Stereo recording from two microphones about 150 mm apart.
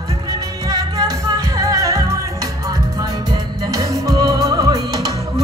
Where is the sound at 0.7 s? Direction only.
25° right (ahead or behind).